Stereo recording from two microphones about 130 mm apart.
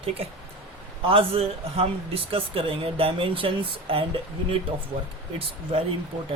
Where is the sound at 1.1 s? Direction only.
45° right (ahead or behind).